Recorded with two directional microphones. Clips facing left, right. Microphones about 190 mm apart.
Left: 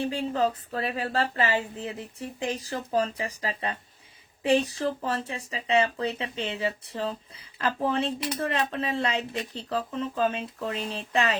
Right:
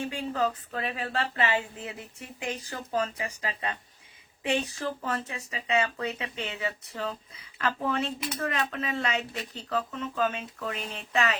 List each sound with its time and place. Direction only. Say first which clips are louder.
0.0 s speech: left 3 dB; 35° left (ahead or behind)